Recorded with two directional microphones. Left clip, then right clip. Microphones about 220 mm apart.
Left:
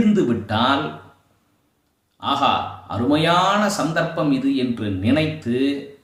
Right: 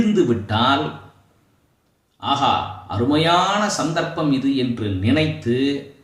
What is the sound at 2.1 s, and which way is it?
A man's voice, 5° left (ahead or behind).